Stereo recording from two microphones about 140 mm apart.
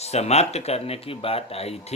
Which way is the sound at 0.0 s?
50° left (ahead or behind).